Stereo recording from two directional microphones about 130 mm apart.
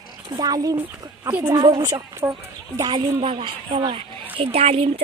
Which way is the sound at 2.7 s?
35° right (ahead or behind).